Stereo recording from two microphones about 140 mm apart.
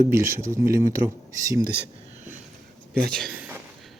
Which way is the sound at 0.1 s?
15° right (ahead or behind).